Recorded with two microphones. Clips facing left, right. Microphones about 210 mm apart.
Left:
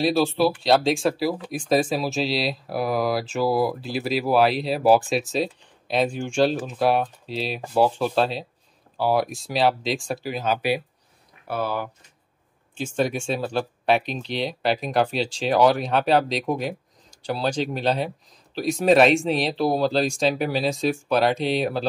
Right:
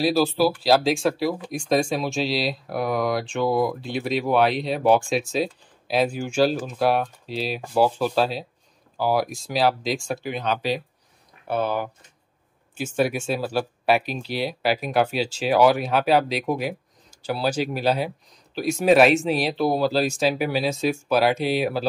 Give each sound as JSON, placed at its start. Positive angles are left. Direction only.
{"t": 0.0, "sound": "speech", "side_deg": 0}
{"t": 11.4, "sound": "speech", "side_deg": -20}
{"t": 12.7, "sound": "speech", "side_deg": -10}